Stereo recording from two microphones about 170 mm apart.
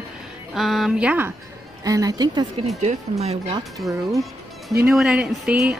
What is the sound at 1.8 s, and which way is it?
Speech, 20° right (ahead or behind).